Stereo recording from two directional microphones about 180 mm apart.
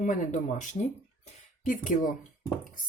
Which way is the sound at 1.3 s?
45° left (ahead or behind).